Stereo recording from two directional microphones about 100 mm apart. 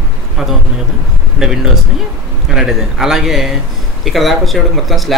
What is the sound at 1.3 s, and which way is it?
Speech, 5° right (ahead or behind).